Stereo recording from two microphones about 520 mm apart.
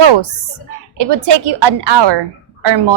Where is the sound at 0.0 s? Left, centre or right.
Right.